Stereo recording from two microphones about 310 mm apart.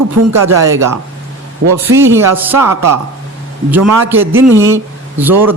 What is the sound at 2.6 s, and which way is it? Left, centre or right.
Speech, right.